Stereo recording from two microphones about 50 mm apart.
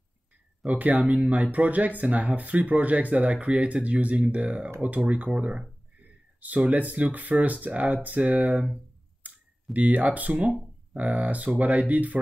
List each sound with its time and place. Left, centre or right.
0.7 s speech: right
6.7 s speech: right
9.2 s clicking: right
9.8 s speech: right